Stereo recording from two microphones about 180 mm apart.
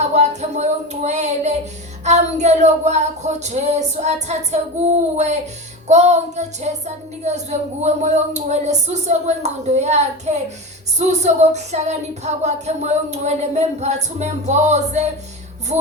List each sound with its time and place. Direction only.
0.0 s speech: 40° right (ahead or behind)